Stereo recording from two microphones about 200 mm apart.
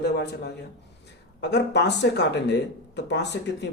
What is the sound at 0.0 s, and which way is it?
Speech, 55° left (ahead or behind).